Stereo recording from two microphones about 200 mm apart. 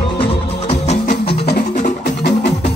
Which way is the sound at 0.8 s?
35° left (ahead or behind).